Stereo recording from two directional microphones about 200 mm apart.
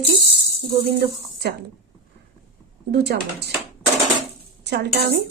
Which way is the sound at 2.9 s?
55° right (ahead or behind).